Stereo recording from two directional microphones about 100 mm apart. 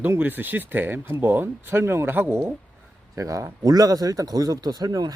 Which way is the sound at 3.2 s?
30° right (ahead or behind).